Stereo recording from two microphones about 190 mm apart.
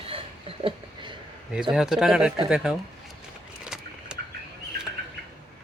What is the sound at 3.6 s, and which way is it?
Vehicle, 5° right (ahead or behind).